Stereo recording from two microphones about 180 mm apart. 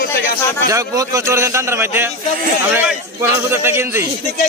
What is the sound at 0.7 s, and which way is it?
A man's voice, 15° right (ahead or behind).